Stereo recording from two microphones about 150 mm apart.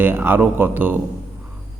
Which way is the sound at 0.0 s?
15° right (ahead or behind).